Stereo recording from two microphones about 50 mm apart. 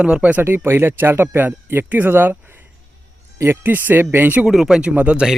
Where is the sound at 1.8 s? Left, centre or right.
Right.